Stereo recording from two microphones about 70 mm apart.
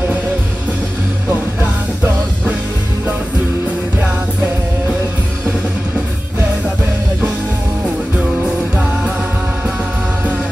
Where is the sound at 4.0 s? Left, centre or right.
Right.